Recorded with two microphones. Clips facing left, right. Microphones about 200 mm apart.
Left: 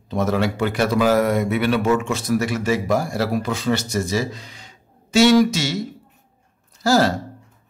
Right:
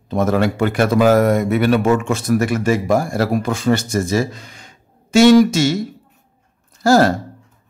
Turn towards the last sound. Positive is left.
turn(degrees=-50)  # may be behind; listen again after turning